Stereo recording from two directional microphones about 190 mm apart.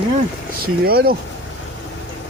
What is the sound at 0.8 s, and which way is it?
Speech, 55° right (ahead or behind).